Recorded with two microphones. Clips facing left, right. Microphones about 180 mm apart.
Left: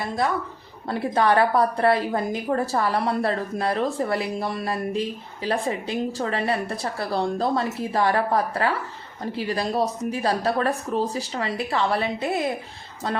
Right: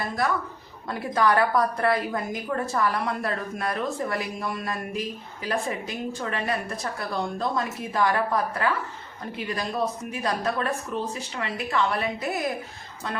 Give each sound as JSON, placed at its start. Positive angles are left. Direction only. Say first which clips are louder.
{"t": 0.9, "sound": "a woman's voice", "louder": "left 2 dB", "side_deg": 30}